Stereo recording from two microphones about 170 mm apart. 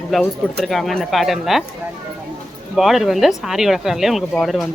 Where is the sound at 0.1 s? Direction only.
Centre (ahead or behind).